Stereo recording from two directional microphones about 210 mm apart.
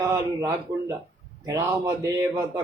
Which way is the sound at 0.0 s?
15° right (ahead or behind).